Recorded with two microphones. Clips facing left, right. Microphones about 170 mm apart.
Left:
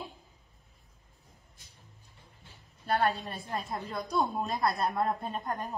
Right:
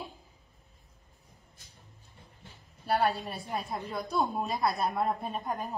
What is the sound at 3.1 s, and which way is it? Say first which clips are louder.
A woman's voice: even; centre (ahead or behind).